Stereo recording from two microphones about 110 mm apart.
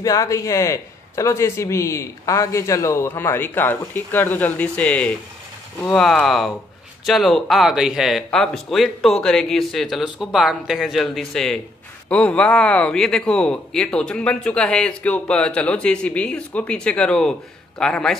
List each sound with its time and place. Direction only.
0.0 s a man's voice: 30° left (ahead or behind); by 18.1 s 5° left (ahead or behind)